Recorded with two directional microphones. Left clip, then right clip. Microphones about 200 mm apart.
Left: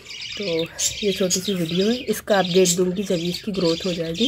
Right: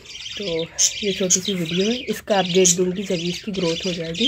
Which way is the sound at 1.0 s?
15° right (ahead or behind).